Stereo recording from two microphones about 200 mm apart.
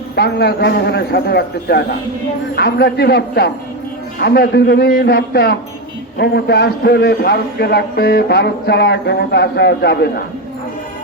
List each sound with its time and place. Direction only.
0.2 s a man's voice: 55° left (ahead or behind)